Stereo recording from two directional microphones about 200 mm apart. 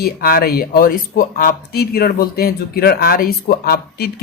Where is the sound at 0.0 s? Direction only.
45° left (ahead or behind).